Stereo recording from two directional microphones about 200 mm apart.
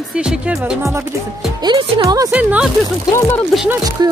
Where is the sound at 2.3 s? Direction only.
5° right (ahead or behind).